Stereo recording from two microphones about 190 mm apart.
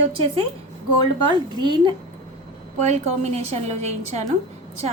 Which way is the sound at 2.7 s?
40° right (ahead or behind).